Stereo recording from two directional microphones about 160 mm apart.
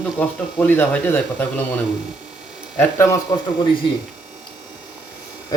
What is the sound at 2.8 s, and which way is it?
Speech, 15° left (ahead or behind).